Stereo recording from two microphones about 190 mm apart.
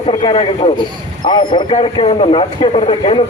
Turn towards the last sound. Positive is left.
turn(degrees=30)  # may be behind; listen again after turning